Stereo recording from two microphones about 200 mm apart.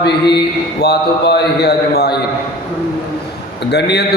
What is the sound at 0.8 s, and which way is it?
A man's voice, 55° left (ahead or behind).